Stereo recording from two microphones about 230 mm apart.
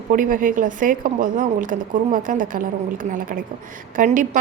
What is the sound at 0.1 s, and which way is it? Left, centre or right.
A woman's voice, right.